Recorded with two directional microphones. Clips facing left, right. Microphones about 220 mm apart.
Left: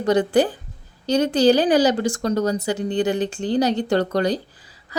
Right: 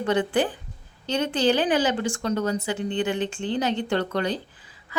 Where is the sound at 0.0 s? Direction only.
40° left (ahead or behind).